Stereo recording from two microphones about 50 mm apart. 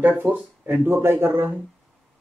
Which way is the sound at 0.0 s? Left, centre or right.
Right.